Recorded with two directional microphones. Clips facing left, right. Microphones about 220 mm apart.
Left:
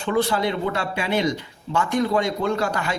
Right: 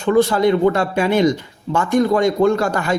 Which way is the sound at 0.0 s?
45° right (ahead or behind).